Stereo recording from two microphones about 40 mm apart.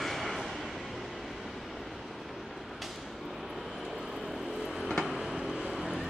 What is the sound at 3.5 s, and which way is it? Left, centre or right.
Vehicle, centre.